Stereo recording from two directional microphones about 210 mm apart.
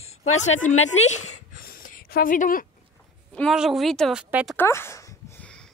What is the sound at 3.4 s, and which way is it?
A woman's voice, centre (ahead or behind).